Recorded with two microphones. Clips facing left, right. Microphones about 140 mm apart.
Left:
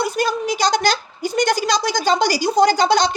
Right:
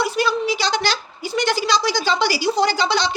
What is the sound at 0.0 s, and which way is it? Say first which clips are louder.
A woman's voice: even; 45° left (ahead or behind).